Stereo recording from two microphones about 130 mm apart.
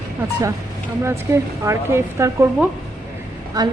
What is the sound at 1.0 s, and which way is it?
Speech, 20° right (ahead or behind).